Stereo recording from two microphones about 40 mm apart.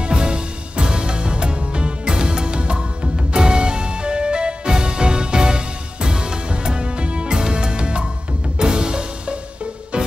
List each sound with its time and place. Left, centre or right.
0.0 s music: right